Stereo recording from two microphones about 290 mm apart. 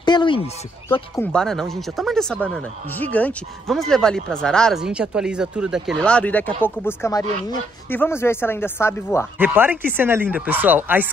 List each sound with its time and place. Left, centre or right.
0.0 s a sound: centre
0.8 s speech: centre
1.2 s speech: centre
9.4 s speech: centre